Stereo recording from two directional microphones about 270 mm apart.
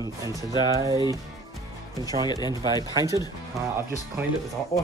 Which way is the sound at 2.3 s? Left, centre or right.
Centre.